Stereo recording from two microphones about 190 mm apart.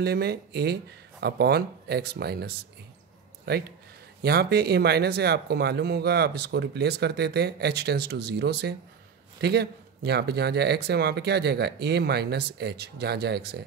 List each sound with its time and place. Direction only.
0.0 s speech: 60° right (ahead or behind)